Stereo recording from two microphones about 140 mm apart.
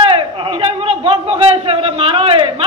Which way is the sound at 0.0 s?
40° right (ahead or behind).